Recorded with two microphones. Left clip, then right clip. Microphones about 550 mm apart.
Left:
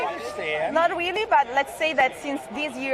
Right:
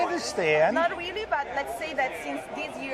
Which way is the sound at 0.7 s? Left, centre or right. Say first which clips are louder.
Left 5 dB; left.